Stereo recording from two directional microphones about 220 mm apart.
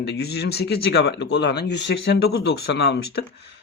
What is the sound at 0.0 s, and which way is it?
Speech, 45° left (ahead or behind).